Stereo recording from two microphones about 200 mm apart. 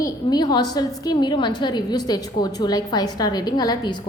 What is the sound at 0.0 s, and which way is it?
A woman's voice, 20° left (ahead or behind).